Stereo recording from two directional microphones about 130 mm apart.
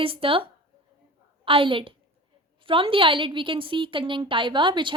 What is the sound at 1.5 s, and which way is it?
A woman's voice, 45° right (ahead or behind).